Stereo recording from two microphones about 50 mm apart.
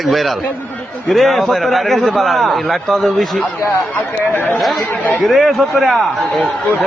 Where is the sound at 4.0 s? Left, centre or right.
Left.